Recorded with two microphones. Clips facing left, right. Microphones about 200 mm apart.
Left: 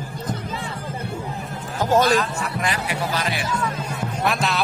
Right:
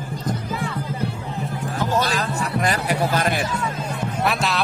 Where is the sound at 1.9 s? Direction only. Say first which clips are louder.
Left 7 dB; 40° left (ahead or behind).